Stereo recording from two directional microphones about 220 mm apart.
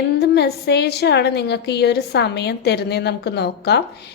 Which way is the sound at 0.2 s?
45° left (ahead or behind).